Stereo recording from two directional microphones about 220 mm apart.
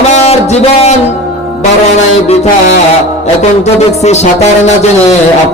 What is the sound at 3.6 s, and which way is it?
A man's voice, 30° left (ahead or behind).